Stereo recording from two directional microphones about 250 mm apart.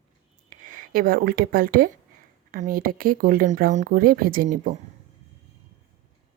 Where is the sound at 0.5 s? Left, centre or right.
Right.